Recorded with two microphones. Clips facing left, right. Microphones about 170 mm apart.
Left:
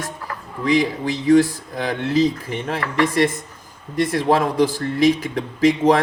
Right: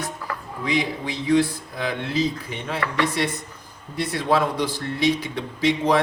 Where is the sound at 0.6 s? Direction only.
45° left (ahead or behind).